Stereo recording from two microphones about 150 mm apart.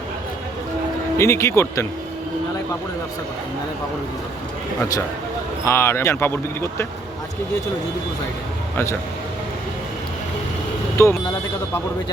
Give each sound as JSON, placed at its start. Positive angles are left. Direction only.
{"t": 1.2, "sound": "speech", "side_deg": 20}
{"t": 5.6, "sound": "speech", "side_deg": 15}
{"t": 8.7, "sound": "speech", "side_deg": 20}
{"t": 10.9, "sound": "speech", "side_deg": 20}